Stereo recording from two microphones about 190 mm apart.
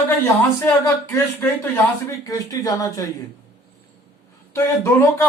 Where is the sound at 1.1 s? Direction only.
15° left (ahead or behind).